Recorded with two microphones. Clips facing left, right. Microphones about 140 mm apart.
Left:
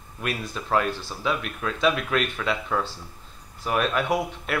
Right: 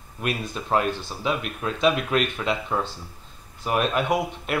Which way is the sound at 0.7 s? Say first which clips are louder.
Right 1 dB; 20° right (ahead or behind).